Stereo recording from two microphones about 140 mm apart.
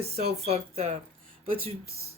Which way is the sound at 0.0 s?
45° right (ahead or behind).